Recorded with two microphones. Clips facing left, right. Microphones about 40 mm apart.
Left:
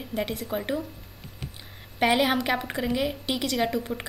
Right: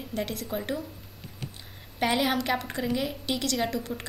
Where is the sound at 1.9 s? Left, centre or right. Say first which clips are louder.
Left 3 dB; centre.